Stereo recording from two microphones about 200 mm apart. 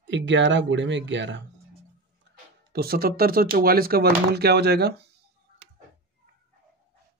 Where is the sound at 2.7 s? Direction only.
50° right (ahead or behind).